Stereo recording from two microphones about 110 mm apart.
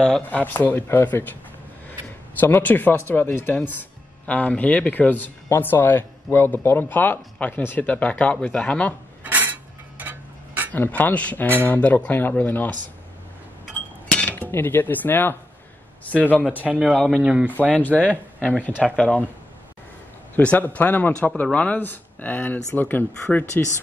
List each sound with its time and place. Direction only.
0.0 s speech: 10° left (ahead or behind)
2.4 s speech: 20° left (ahead or behind)
9.2 s a sound: 15° right (ahead or behind)
10.7 s speech: 15° left (ahead or behind)
13.7 s cutlery: 15° left (ahead or behind)
16.1 s speech: 15° left (ahead or behind)
16.6 s speech: 10° right (ahead or behind)
17.7 s speech: 10° left (ahead or behind)
20.3 s speech: 15° left (ahead or behind)